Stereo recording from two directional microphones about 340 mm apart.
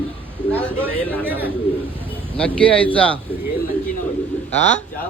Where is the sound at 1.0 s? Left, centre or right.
Centre.